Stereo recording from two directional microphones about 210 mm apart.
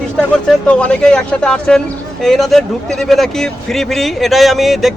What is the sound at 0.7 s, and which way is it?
Speech, 5° left (ahead or behind).